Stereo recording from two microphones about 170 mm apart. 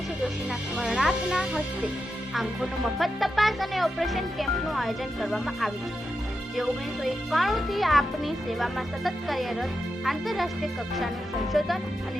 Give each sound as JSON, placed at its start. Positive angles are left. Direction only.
{"t": 0.8, "sound": "a child's voice", "side_deg": 0}